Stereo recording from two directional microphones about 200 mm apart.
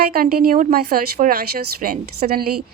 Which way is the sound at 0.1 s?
45° right (ahead or behind).